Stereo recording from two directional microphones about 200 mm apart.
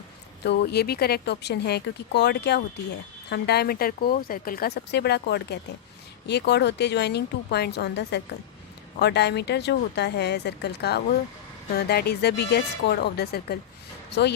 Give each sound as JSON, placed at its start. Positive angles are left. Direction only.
{"t": 0.4, "sound": "speech", "side_deg": 55}